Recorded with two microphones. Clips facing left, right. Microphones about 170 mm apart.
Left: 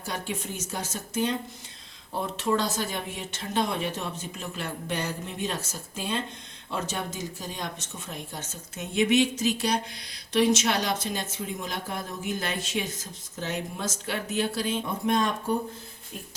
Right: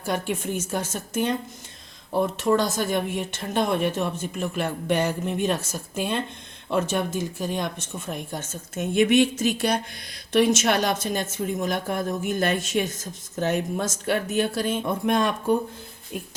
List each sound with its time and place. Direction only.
0.0 s speech: 50° right (ahead or behind)
2.4 s speech: 50° right (ahead or behind)